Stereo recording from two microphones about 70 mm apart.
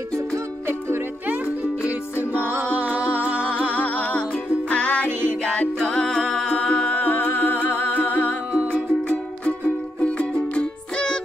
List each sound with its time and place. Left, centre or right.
3.2 s music: right
3.4 s music: left
9.4 s music: centre